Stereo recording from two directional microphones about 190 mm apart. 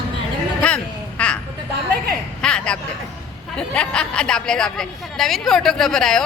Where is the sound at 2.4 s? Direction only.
5° left (ahead or behind).